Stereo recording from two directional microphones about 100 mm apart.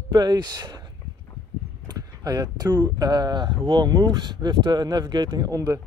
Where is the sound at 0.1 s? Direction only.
45° right (ahead or behind).